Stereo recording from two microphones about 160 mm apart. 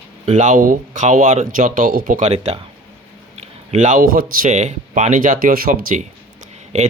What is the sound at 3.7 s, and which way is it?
Speech, 50° right (ahead or behind).